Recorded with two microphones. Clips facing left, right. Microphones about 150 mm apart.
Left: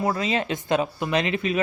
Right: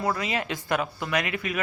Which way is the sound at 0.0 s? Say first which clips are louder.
Left 3 dB; 25° left (ahead or behind).